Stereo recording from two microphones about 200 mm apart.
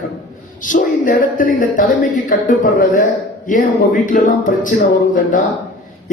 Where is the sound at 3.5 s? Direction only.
40° left (ahead or behind).